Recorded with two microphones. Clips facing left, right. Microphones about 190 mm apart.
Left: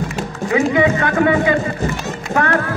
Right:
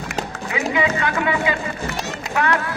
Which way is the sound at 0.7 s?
45° left (ahead or behind).